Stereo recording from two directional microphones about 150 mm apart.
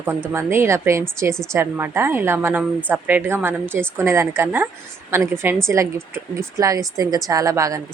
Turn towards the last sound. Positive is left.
turn(degrees=-20)  # may be behind; listen again after turning